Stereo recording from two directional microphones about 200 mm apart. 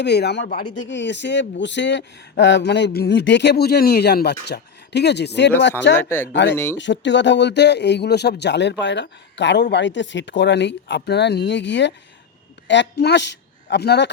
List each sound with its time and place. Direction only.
0.0 s speech: 55° left (ahead or behind)
0.7 s speech: 65° left (ahead or behind)
6.0 s speech: 10° left (ahead or behind)
6.3 s a man's voice: 65° left (ahead or behind)